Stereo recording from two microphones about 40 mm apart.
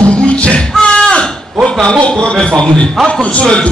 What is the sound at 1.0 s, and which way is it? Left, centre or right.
Livestock, left.